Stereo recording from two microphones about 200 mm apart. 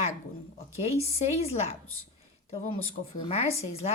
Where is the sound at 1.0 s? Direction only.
30° left (ahead or behind).